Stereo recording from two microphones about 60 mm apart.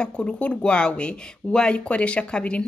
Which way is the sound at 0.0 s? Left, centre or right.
Centre.